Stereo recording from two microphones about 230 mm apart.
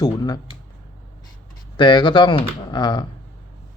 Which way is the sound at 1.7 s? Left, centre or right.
Left.